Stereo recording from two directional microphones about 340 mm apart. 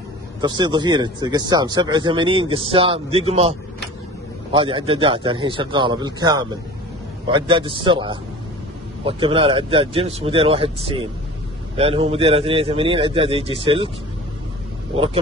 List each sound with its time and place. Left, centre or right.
0.4 s speech: centre